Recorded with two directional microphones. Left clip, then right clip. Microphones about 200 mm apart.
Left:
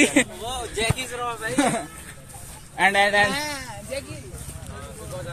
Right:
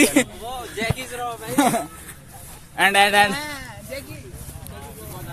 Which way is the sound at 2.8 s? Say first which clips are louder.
Right 3 dB; 60° right (ahead or behind).